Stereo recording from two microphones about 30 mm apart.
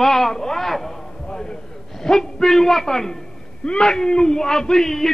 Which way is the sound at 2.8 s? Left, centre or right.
Centre.